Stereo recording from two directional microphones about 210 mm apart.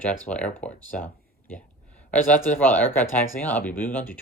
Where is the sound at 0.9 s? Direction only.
10° left (ahead or behind).